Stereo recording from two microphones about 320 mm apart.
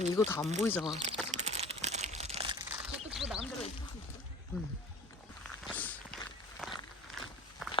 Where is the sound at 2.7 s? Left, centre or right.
Centre.